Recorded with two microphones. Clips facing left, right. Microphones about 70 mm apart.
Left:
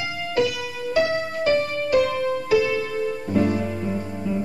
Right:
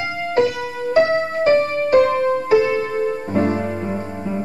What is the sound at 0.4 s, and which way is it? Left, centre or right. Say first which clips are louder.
Music: right 4 dB; right.